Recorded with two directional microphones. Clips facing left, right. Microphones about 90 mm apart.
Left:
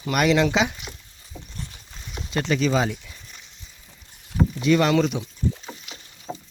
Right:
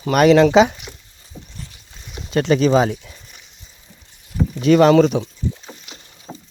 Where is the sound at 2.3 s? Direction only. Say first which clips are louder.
Right 7 dB; 45° right (ahead or behind).